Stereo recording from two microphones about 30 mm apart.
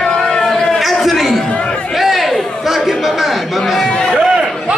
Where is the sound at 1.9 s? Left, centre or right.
Centre.